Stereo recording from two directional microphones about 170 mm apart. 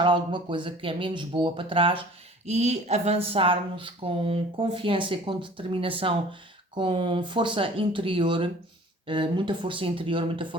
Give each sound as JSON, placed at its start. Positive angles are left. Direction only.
{"t": 0.0, "sound": "speech", "side_deg": -30}